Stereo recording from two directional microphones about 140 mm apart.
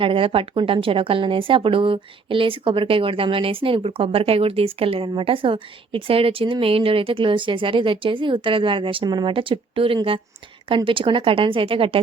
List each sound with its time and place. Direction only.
0.0 s speech: 40° right (ahead or behind)